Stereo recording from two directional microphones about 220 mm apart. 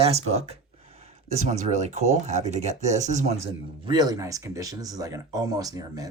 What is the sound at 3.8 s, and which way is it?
Speech, 20° right (ahead or behind).